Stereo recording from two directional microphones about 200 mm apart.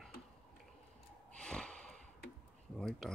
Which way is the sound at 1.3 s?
5° left (ahead or behind).